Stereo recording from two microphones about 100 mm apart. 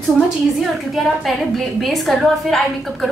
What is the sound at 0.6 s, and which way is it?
A woman's voice, centre (ahead or behind).